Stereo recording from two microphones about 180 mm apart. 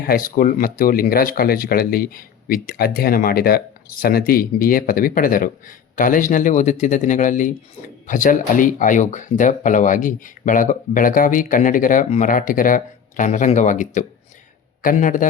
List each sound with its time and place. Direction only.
0.0 s speech: 55° left (ahead or behind)